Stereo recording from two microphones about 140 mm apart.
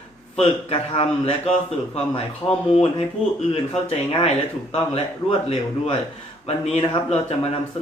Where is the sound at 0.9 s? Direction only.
40° left (ahead or behind).